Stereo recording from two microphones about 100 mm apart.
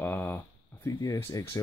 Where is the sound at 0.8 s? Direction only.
35° left (ahead or behind).